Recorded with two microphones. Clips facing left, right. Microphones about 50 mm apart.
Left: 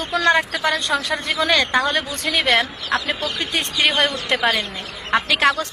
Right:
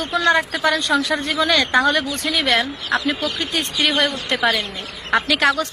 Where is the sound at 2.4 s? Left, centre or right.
Left.